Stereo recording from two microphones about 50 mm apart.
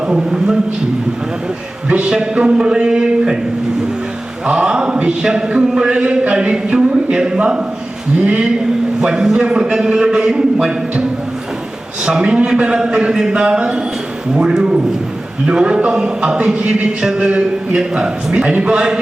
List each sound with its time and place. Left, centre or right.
1.9 s speech: right
4.4 s a man's voice: centre
12.0 s speech: right